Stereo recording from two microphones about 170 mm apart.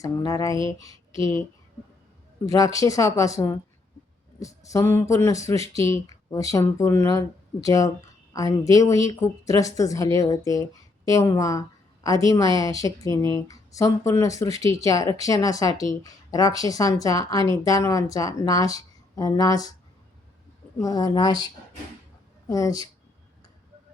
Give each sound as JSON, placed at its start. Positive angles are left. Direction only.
{"t": 0.0, "sound": "speech", "side_deg": 20}
{"t": 2.5, "sound": "a man's voice", "side_deg": 20}
{"t": 20.8, "sound": "speech", "side_deg": 25}